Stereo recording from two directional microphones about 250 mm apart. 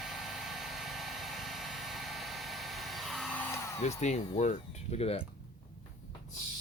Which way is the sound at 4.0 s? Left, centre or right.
Left.